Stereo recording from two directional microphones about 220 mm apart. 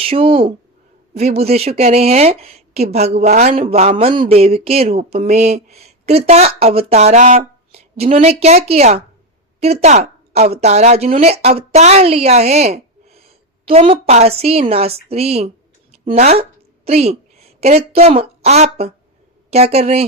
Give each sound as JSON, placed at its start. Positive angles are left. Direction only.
{"t": 0.0, "sound": "speech", "side_deg": -25}